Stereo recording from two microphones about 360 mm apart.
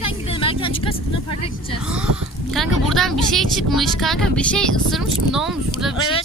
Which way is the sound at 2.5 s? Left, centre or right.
Centre.